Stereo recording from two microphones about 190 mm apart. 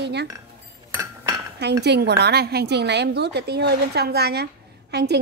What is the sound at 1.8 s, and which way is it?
A woman's voice, 60° right (ahead or behind).